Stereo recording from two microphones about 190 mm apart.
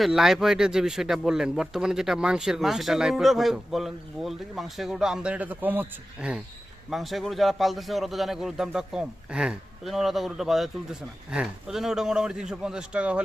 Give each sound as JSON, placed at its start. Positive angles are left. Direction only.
{"t": 0.0, "sound": "speech", "side_deg": 0}